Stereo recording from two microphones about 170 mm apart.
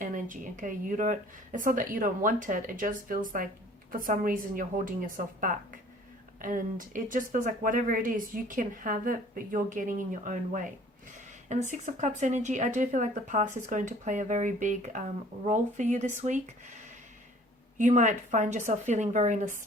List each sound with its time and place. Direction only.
0.0 s speech: 50° right (ahead or behind)
17.7 s speech: 45° right (ahead or behind)